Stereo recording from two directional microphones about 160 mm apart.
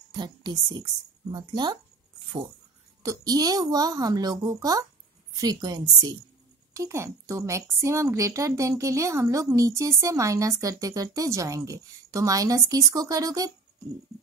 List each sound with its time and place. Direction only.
0.1 s a woman's voice: 25° right (ahead or behind)
3.0 s a woman's voice: 20° right (ahead or behind)